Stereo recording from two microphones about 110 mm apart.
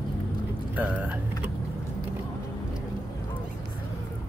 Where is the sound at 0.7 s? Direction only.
15° right (ahead or behind).